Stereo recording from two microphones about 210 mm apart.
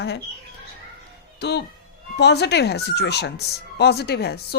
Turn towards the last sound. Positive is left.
turn(degrees=50)  # may be behind; listen again after turning